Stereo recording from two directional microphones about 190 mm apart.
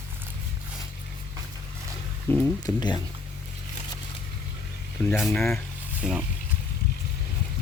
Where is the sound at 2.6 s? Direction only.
20° left (ahead or behind).